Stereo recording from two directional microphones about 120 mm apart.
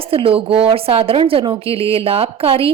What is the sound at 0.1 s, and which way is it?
A woman's voice, 50° right (ahead or behind).